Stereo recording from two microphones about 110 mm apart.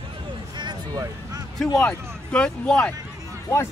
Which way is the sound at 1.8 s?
10° left (ahead or behind).